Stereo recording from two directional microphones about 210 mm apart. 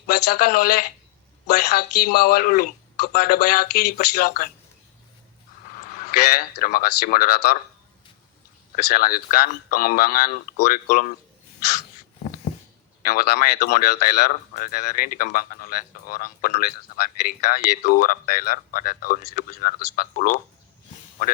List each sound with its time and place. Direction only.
0.3 s speech: 45° left (ahead or behind)
5.8 s a sound: 40° left (ahead or behind)
6.6 s speech: 45° left (ahead or behind)
8.7 s speech: 45° left (ahead or behind)
13.0 s speech: 45° left (ahead or behind)